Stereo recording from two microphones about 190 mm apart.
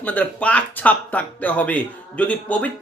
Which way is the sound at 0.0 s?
10° left (ahead or behind).